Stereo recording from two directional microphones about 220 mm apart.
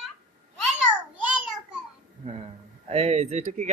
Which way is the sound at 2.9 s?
30° right (ahead or behind).